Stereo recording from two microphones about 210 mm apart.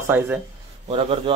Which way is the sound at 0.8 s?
30° right (ahead or behind).